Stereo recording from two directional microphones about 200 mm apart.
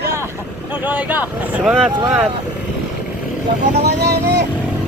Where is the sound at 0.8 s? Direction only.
10° right (ahead or behind).